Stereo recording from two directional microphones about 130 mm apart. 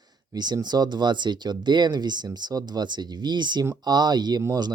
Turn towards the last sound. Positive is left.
turn(degrees=-30)  # may be behind; listen again after turning